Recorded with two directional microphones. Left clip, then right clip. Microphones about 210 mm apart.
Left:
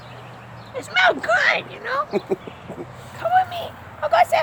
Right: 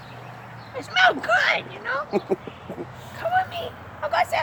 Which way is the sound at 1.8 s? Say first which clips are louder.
Left 3 dB; 25° left (ahead or behind).